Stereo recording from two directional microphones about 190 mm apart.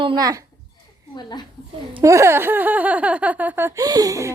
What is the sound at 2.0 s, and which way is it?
Speech, 15° right (ahead or behind).